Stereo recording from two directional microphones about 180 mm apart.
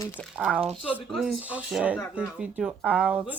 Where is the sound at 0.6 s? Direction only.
30° right (ahead or behind).